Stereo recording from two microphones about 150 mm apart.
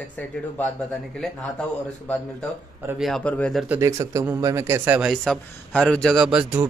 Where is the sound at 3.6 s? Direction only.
20° right (ahead or behind).